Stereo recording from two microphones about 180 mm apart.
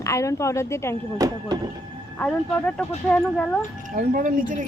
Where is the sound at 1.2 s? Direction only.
20° right (ahead or behind).